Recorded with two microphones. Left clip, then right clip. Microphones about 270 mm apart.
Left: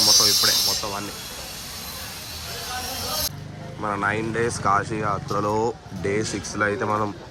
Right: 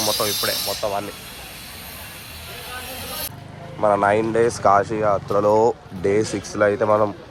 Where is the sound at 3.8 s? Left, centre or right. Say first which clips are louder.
Right 8 dB; centre.